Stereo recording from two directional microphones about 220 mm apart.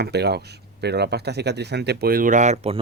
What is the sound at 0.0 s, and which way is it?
Speech, 50° right (ahead or behind).